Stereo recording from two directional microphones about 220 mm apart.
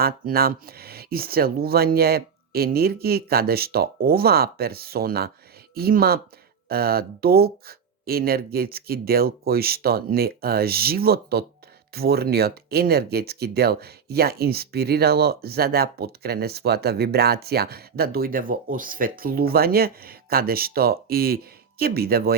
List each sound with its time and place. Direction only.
0.0 s speech: 45° right (ahead or behind)